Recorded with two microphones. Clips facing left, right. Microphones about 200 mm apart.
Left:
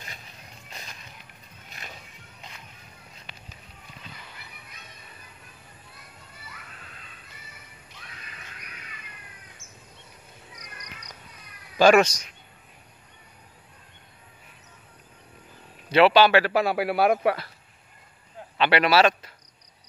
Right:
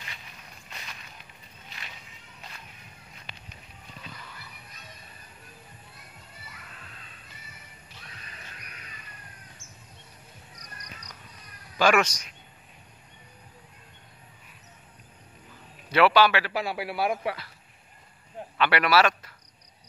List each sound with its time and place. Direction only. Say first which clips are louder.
1.7 s music: left 3 dB; 45° left (ahead or behind)
11.8 s speech: left 6 dB; 30° left (ahead or behind)
15.9 s a man's voice: left 3 dB; 25° left (ahead or behind)
16.3 s a man's voice: left 7 dB; 45° left (ahead or behind)
18.6 s speech: left 3 dB; 25° left (ahead or behind)